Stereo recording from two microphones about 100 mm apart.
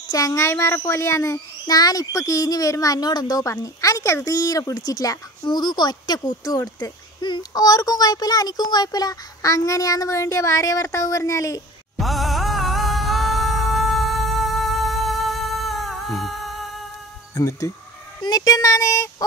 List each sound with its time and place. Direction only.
0.1 s speech: 35° left (ahead or behind)
5.4 s speech: 50° left (ahead or behind); by 11.6 s 30° left (ahead or behind)
12.0 s music: centre (ahead or behind)
17.3 s speech: 30° left (ahead or behind)